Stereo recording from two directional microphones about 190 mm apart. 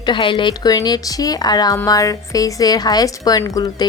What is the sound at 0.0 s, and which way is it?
Speech, 25° left (ahead or behind).